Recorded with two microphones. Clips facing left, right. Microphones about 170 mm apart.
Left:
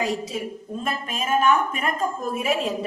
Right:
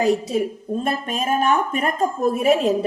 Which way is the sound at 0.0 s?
40° right (ahead or behind).